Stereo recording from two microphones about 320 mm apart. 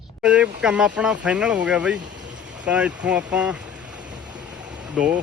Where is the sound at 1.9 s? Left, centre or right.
Right.